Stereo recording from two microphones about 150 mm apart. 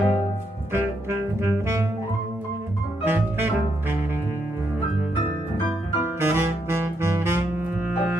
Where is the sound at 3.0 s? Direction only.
15° right (ahead or behind).